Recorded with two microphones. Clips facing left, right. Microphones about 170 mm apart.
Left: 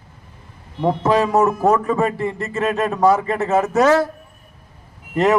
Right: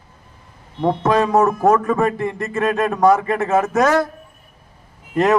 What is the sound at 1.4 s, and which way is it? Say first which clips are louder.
Speech: right 1 dB; 20° left (ahead or behind).